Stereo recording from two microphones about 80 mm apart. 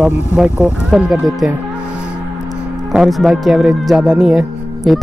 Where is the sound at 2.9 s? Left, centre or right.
Centre.